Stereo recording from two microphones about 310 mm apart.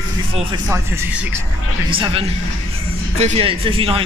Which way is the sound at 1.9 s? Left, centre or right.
Centre.